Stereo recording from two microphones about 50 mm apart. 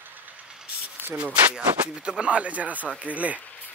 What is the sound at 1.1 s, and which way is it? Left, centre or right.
Speech, right.